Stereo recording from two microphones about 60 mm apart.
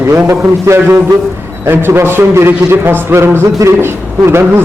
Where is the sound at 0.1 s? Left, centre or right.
Right.